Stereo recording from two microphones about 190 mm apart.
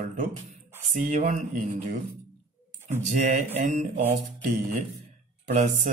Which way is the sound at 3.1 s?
40° right (ahead or behind).